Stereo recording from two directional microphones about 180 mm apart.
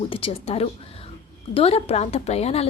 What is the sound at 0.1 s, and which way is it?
A woman's voice, 30° left (ahead or behind).